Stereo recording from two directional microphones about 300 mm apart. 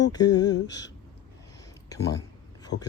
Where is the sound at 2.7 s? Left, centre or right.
Left.